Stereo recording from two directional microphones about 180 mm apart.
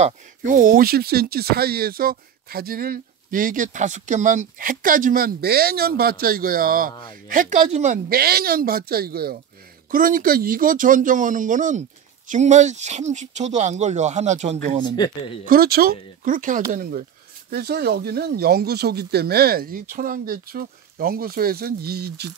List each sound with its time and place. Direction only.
0.0 s speech: 45° right (ahead or behind)
15.4 s speech: 55° right (ahead or behind)